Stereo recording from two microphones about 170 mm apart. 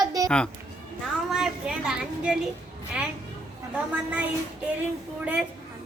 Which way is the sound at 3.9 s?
5° right (ahead or behind).